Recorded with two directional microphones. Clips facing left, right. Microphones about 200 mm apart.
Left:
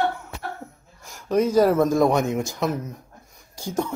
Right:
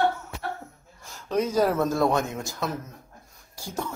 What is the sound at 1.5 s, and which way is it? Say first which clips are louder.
Speech: left 6 dB; 10° left (ahead or behind).